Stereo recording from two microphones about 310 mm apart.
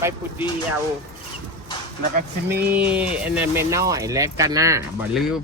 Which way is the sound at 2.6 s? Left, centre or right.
Centre.